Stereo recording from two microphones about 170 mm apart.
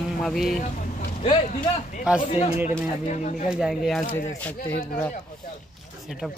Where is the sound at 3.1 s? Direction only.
45° left (ahead or behind).